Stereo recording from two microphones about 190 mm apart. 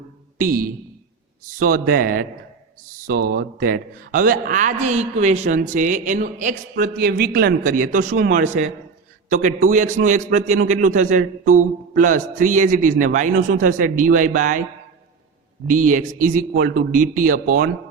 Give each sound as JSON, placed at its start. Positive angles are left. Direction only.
{"t": 0.3, "sound": "a man's voice", "side_deg": -50}
{"t": 15.7, "sound": "a man's voice", "side_deg": -45}